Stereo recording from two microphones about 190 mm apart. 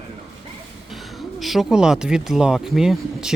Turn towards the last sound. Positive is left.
turn(degrees=0)  # may be behind; listen again after turning